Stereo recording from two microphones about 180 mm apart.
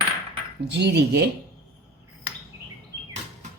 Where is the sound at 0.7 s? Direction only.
65° right (ahead or behind).